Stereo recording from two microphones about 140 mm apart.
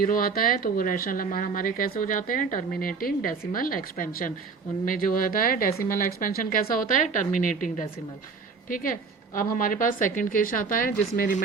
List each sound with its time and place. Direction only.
0.0 s a woman's voice: 90° left
11.2 s speech: 65° left (ahead or behind)